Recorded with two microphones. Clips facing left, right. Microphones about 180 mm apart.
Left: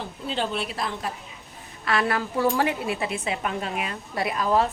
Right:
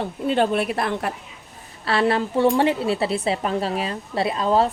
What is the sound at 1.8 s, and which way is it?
A woman's voice, 30° right (ahead or behind).